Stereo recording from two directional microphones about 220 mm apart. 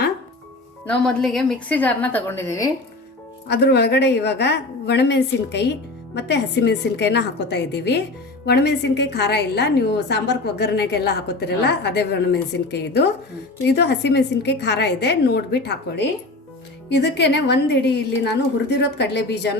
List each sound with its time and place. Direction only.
0.9 s a woman's voice: centre (ahead or behind)
3.4 s a woman's voice: 50° left (ahead or behind)